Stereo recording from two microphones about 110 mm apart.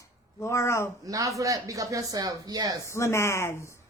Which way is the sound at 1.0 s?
30° right (ahead or behind).